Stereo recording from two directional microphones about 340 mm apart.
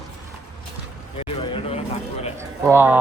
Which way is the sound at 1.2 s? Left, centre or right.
Centre.